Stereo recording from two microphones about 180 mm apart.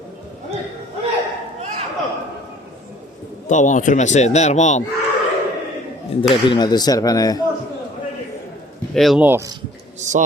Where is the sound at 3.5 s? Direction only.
45° left (ahead or behind).